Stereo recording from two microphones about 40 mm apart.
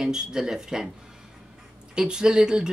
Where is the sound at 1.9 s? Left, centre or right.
Right.